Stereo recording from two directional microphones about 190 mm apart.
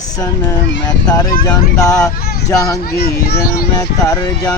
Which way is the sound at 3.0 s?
55° left (ahead or behind).